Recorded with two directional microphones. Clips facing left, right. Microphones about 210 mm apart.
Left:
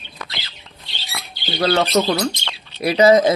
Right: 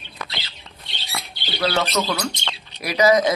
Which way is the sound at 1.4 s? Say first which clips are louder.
Left 5 dB; 35° left (ahead or behind).